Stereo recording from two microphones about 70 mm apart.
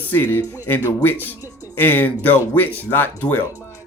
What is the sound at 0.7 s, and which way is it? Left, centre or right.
Speech, left.